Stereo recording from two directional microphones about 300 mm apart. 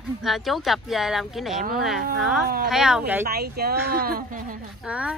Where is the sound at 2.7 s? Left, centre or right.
Centre.